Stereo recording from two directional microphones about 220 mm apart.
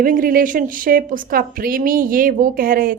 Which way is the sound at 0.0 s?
40° right (ahead or behind).